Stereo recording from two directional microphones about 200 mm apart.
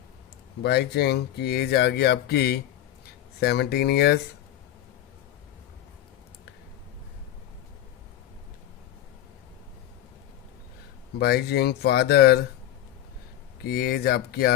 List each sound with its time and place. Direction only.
0.6 s speech: 55° left (ahead or behind)
11.2 s speech: 55° left (ahead or behind)
13.7 s speech: 50° left (ahead or behind)